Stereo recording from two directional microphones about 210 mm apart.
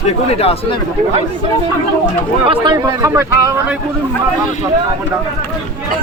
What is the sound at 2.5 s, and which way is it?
Speech, 20° right (ahead or behind).